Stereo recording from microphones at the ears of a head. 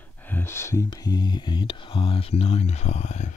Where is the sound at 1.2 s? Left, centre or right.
Left.